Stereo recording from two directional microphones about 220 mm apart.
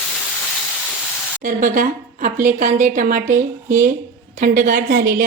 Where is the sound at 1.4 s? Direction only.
35° right (ahead or behind).